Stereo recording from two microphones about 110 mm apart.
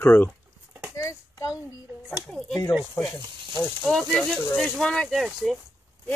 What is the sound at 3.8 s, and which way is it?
Speech, centre (ahead or behind).